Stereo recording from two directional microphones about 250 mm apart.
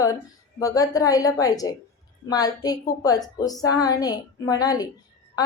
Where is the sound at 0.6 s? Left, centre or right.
Centre.